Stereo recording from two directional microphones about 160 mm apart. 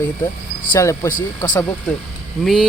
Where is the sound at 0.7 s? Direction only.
20° left (ahead or behind).